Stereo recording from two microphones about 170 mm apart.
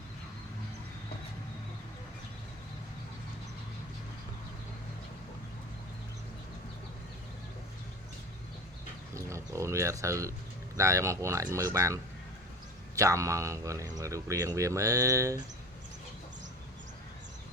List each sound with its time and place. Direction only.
9.1 s speech: 20° right (ahead or behind)
13.0 s speech: 20° right (ahead or behind)